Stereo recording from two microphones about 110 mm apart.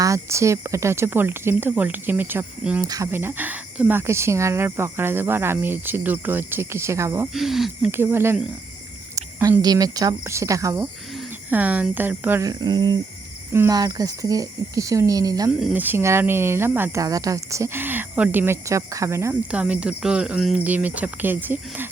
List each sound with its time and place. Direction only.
0.0 s speech: 30° right (ahead or behind)
2.8 s speech: 30° right (ahead or behind)
3.1 s speech: 20° right (ahead or behind)
7.3 s speech: centre (ahead or behind)
7.9 s speech: 20° right (ahead or behind)
9.1 s speech: 35° right (ahead or behind)
11.5 s speech: 15° right (ahead or behind)
12.4 s speech: 35° right (ahead or behind)
15.7 s speech: 15° right (ahead or behind)
17.0 s speech: 30° right (ahead or behind)
19.5 s speech: 10° right (ahead or behind)